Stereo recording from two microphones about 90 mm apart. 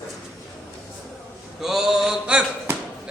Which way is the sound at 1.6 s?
5° right (ahead or behind).